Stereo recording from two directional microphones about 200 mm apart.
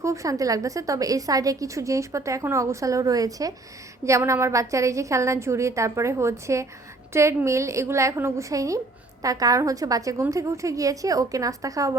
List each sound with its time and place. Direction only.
0.0 s a woman's voice: 15° right (ahead or behind)